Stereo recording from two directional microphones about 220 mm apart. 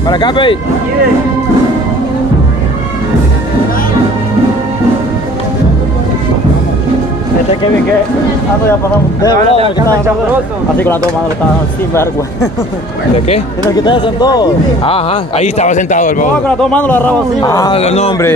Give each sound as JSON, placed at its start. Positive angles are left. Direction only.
{"t": 0.1, "sound": "a man's voice", "side_deg": 20}
{"t": 9.2, "sound": "a man's voice", "side_deg": 20}
{"t": 9.8, "sound": "speech", "side_deg": -10}
{"t": 11.9, "sound": "a man's voice", "side_deg": 10}
{"t": 13.7, "sound": "a man's voice", "side_deg": 20}
{"t": 16.4, "sound": "a man's voice", "side_deg": 5}
{"t": 17.7, "sound": "a man's voice", "side_deg": 30}